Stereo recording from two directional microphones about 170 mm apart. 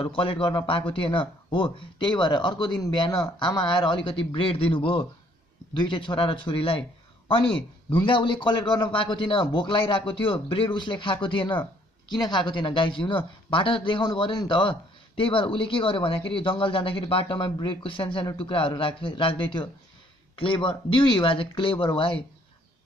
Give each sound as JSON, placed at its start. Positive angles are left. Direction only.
{"t": 0.0, "sound": "a man's voice", "side_deg": 30}
{"t": 7.9, "sound": "a man's voice", "side_deg": 30}